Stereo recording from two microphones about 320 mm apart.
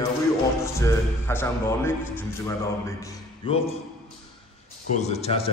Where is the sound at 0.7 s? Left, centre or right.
Centre.